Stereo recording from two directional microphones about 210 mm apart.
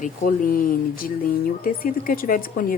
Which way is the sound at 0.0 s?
40° left (ahead or behind).